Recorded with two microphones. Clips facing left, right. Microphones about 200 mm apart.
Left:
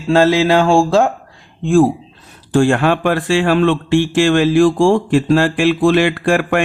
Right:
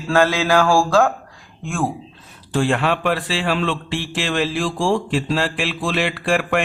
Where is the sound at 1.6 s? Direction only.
35° left (ahead or behind).